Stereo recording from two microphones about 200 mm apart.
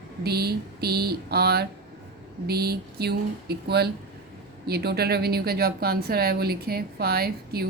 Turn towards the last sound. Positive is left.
turn(degrees=-50)  # may be behind; listen again after turning